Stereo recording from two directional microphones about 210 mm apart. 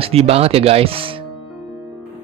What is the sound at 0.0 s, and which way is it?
Speech, 30° right (ahead or behind).